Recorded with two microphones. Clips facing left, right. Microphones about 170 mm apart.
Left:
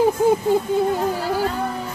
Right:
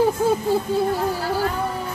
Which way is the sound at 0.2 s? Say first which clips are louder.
Left 3 dB; 15° left (ahead or behind).